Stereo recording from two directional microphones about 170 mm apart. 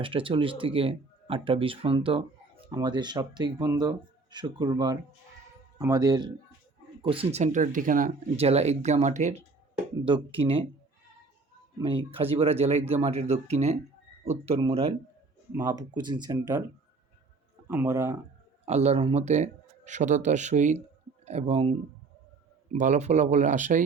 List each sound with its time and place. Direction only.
0.0 s speech: 30° right (ahead or behind); by 8.1 s 50° right (ahead or behind)
8.4 s speech: 40° right (ahead or behind)
10.0 s speech: 35° right (ahead or behind)
11.8 s speech: 35° right (ahead or behind)
15.5 s speech: 20° right (ahead or behind)
17.7 s speech: 15° right (ahead or behind)
18.6 s speech: 40° right (ahead or behind)